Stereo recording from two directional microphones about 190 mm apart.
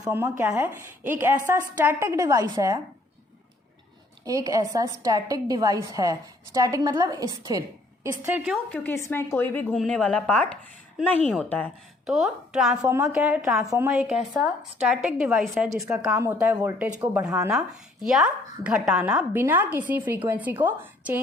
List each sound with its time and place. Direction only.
0.0 s a woman's voice: 15° right (ahead or behind)
4.2 s a woman's voice: 20° right (ahead or behind)
8.2 s a woman's voice: 5° right (ahead or behind)
8.7 s a woman's voice: 10° left (ahead or behind); by 21.2 s 10° right (ahead or behind)